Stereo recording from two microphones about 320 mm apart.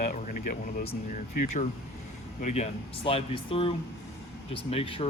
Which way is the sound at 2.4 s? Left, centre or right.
Left.